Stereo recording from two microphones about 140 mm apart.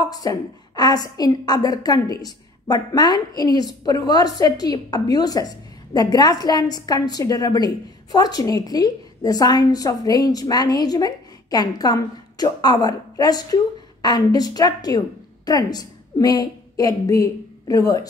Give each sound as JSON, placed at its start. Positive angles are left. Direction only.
{"t": 0.1, "sound": "a woman's voice", "side_deg": 25}